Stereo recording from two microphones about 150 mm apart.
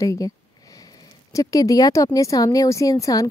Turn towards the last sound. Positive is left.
turn(degrees=20)  # may be behind; listen again after turning